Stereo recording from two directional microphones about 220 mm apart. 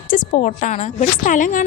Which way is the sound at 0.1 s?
35° left (ahead or behind).